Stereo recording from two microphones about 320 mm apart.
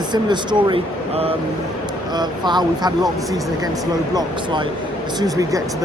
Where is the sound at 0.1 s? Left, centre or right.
Centre.